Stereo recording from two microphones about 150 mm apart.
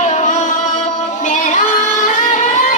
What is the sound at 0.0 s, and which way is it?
Music, 50° left (ahead or behind).